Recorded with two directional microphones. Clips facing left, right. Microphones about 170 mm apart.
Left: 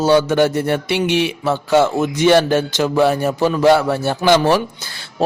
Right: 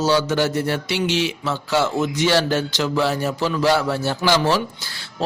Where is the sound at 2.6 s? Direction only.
50° left (ahead or behind).